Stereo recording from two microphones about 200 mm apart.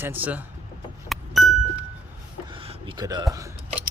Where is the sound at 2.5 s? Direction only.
25° right (ahead or behind).